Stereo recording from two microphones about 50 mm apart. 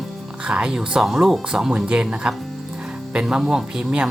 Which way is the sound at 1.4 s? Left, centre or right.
Centre.